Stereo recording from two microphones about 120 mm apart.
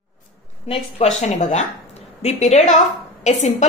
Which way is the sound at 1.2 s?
75° left (ahead or behind).